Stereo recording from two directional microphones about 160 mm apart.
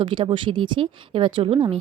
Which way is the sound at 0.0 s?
30° right (ahead or behind).